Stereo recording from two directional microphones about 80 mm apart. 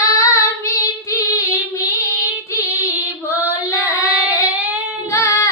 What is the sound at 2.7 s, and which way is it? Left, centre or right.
Female singing, centre.